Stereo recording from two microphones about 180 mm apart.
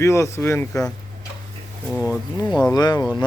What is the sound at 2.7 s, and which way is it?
Speech, 20° left (ahead or behind).